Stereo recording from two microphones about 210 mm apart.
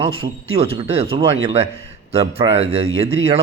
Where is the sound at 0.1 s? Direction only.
75° right (ahead or behind).